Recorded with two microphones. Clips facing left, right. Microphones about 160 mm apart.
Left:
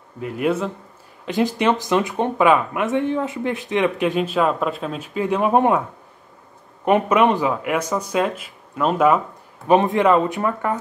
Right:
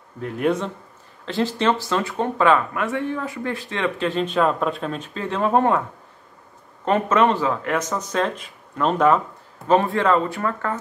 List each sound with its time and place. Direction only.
0.2 s a man's voice: 5° left (ahead or behind)